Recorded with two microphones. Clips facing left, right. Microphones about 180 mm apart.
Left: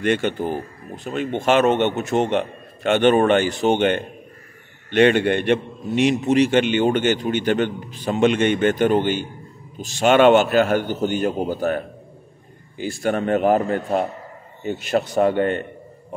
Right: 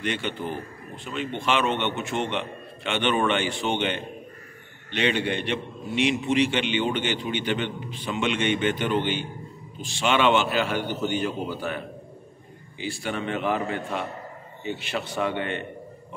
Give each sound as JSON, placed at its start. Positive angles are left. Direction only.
{"t": 0.0, "sound": "a man's voice", "side_deg": 50}